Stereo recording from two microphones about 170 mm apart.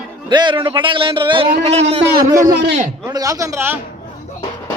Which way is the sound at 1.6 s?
40° right (ahead or behind).